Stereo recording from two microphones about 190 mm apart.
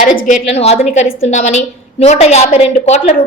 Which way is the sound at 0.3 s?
35° left (ahead or behind).